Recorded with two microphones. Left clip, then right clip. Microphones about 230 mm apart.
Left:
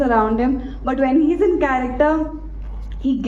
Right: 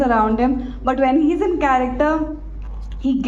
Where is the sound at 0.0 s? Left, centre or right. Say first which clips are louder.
Even; right.